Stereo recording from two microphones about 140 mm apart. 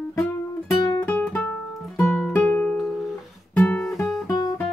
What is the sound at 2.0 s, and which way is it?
Music, 10° left (ahead or behind).